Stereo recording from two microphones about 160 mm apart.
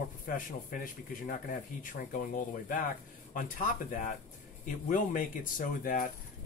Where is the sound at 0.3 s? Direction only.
60° left (ahead or behind).